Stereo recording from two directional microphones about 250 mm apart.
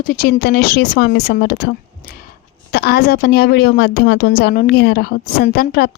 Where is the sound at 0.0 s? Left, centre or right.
Left.